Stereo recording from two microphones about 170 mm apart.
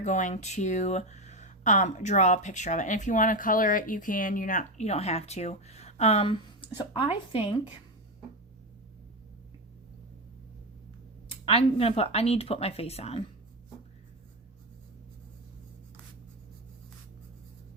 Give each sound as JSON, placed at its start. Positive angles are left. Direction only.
{"t": 0.0, "sound": "speech", "side_deg": 45}
{"t": 11.3, "sound": "speech", "side_deg": 35}